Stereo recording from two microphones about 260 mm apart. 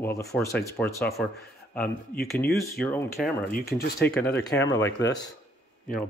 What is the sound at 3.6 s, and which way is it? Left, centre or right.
Speech, left.